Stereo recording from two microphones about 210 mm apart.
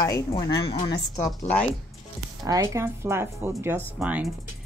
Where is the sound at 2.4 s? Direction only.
15° right (ahead or behind).